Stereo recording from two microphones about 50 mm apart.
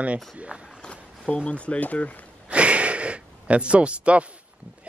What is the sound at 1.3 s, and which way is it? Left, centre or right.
Speech, left.